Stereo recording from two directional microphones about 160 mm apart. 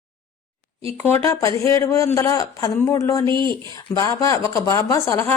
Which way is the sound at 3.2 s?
30° right (ahead or behind).